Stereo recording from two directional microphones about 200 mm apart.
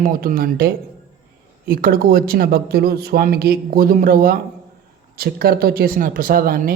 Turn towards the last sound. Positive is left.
turn(degrees=-45)  # may be behind; listen again after turning